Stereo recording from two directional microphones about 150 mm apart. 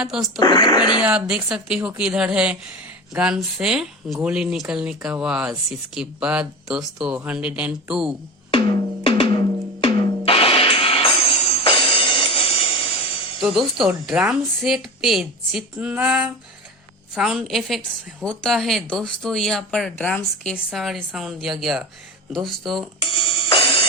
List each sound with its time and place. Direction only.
0.0 s speech: 5° right (ahead or behind)
0.3 s speech: 25° left (ahead or behind)
1.0 s speech: 10° right (ahead or behind)
9.0 s drum: 35° left (ahead or behind)
13.4 s speech: centre (ahead or behind)
23.0 s music: 35° left (ahead or behind)